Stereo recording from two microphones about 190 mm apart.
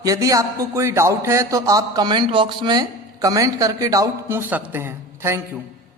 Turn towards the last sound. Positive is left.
turn(degrees=-15)  # may be behind; listen again after turning